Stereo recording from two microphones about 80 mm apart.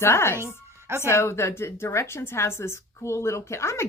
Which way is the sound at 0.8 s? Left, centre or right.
Right.